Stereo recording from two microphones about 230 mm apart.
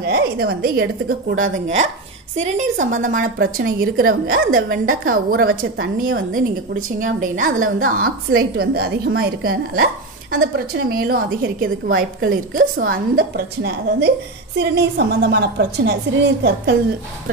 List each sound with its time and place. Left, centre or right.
0.0 s a woman's voice: right